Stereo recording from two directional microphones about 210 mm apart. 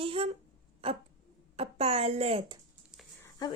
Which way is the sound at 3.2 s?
20° left (ahead or behind).